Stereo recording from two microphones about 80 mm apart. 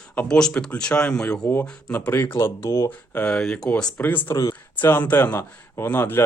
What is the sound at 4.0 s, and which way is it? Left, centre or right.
Speech, left.